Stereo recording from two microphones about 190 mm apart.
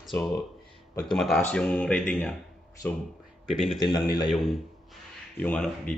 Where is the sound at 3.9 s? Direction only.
20° left (ahead or behind).